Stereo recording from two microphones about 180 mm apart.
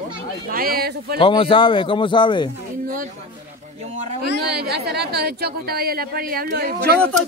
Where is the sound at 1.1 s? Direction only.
30° left (ahead or behind).